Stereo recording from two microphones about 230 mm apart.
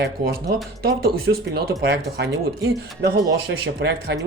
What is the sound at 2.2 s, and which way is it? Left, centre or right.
Speech, right.